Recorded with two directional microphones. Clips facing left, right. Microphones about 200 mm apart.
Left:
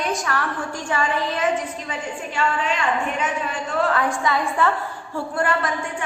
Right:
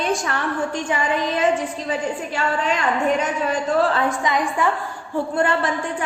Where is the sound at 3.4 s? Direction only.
25° right (ahead or behind).